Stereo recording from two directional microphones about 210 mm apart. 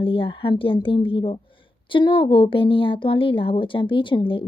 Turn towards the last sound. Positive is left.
turn(degrees=25)  # may be behind; listen again after turning